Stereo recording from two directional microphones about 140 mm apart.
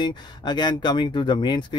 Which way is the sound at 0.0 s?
30° left (ahead or behind).